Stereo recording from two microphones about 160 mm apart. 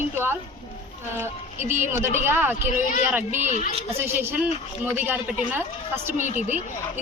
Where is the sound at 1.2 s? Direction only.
15° right (ahead or behind).